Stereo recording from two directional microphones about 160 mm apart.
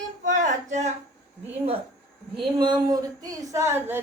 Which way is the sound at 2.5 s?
30° right (ahead or behind).